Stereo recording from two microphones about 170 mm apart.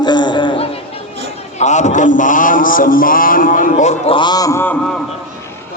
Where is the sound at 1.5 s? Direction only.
45° left (ahead or behind); by 4.8 s 15° left (ahead or behind).